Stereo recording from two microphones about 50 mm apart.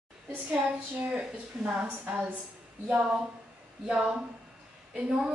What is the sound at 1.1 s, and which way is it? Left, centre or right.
Speech, right.